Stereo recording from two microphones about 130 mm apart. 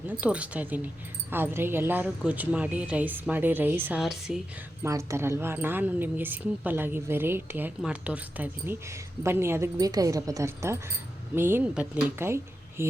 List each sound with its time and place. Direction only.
0.2 s a woman's voice: 10° right (ahead or behind)
4.0 s a woman's voice: 5° right (ahead or behind)
4.8 s a woman's voice: 20° right (ahead or behind)
12.2 s speech: 20° right (ahead or behind)